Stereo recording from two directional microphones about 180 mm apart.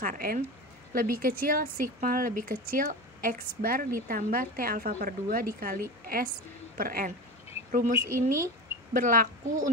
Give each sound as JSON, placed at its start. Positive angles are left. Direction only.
{"t": 0.0, "sound": "a woman's voice", "side_deg": -50}